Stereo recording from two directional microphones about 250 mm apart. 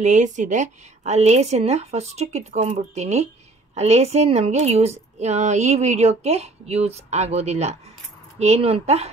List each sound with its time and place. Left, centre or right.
0.0 s speech: right